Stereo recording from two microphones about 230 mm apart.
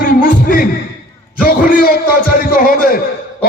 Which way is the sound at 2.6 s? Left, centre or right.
Left.